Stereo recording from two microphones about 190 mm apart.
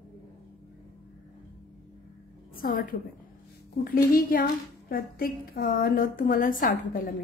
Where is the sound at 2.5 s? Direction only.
50° left (ahead or behind).